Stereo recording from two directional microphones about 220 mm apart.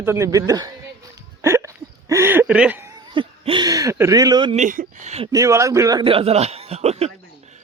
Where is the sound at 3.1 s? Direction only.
20° right (ahead or behind).